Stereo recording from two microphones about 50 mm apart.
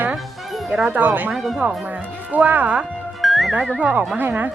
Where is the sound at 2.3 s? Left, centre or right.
Right.